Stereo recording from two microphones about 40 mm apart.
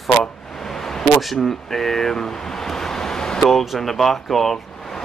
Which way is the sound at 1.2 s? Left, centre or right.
Centre.